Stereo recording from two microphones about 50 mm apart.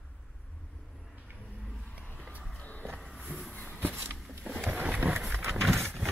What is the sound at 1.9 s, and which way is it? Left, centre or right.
Vehicle, left.